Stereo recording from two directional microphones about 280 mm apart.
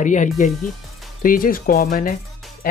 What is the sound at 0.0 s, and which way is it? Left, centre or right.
Speech, left.